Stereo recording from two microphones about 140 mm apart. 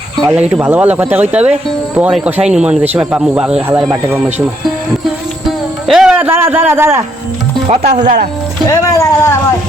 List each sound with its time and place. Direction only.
0.3 s speech: 10° right (ahead or behind)
5.9 s a man's voice: 5° right (ahead or behind)
7.8 s speech: 75° right (ahead or behind)
8.6 s speech: 25° left (ahead or behind)